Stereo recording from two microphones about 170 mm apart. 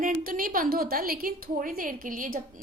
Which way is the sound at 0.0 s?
55° right (ahead or behind).